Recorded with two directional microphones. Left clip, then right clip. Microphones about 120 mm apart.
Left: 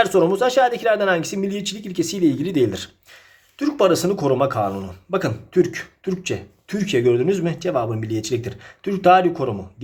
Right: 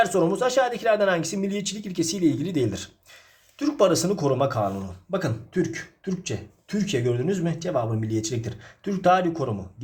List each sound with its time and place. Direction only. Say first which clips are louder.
0.0 s speech: left 5 dB; 25° left (ahead or behind)